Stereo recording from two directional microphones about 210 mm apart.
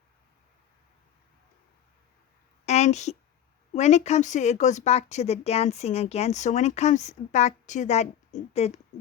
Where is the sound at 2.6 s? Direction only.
30° left (ahead or behind).